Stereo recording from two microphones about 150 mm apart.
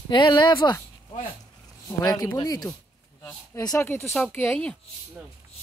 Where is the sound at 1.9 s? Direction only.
25° left (ahead or behind).